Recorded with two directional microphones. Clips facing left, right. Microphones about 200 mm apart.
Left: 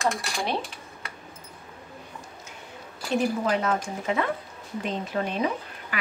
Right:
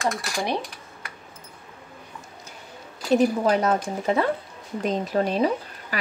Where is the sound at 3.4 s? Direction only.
40° right (ahead or behind).